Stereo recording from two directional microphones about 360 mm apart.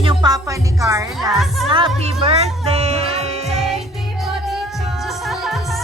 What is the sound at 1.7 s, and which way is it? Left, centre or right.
Music, centre.